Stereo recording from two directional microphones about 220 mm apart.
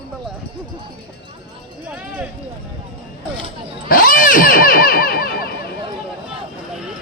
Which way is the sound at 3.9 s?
40° left (ahead or behind).